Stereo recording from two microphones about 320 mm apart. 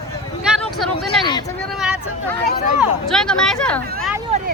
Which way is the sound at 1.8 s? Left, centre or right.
Centre.